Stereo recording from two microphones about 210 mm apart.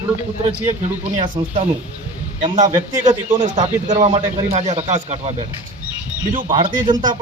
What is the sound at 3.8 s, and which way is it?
Speech, 35° right (ahead or behind).